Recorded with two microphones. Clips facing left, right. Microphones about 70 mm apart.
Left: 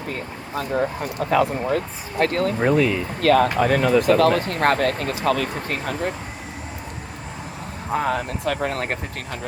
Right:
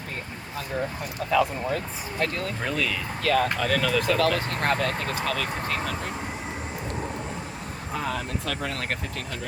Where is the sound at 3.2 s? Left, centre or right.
Left.